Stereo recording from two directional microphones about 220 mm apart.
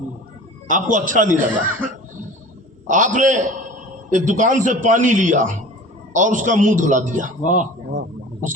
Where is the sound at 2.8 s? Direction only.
35° right (ahead or behind).